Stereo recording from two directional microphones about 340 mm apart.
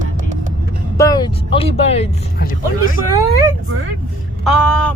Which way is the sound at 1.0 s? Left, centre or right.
Centre.